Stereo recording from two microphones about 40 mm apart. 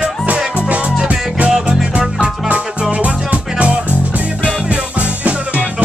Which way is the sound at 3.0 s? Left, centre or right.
Right.